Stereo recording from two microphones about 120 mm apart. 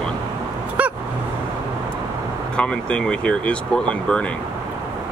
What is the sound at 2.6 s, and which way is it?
Speech, 10° left (ahead or behind).